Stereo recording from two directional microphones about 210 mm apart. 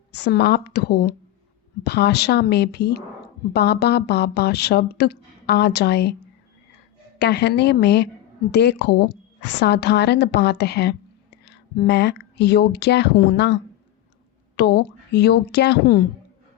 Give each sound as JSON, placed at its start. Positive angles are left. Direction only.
{"t": 0.3, "sound": "speech", "side_deg": 50}
{"t": 7.2, "sound": "a woman's voice", "side_deg": 55}